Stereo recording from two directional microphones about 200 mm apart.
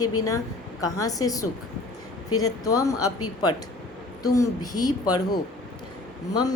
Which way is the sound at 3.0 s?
90° left.